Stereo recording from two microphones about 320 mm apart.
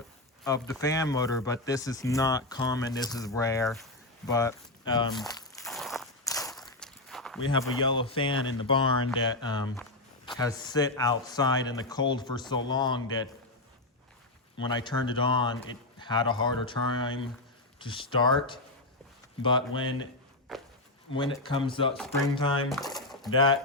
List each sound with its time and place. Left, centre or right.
0.4 s speech: centre
5.6 s a sound: centre
6.2 s walk: centre
7.5 s speech: centre
8.3 s speech: left
8.6 s speech: centre
14.7 s speech: centre
20.5 s speech: centre
21.2 s speech: centre